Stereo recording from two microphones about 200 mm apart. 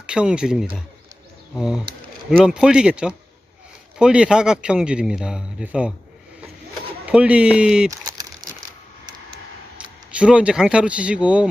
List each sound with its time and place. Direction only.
0.1 s a man's voice: 5° right (ahead or behind)
7.0 s a man's voice: 5° right (ahead or behind)
7.9 s typing: 20° right (ahead or behind)
10.2 s a man's voice: 5° right (ahead or behind)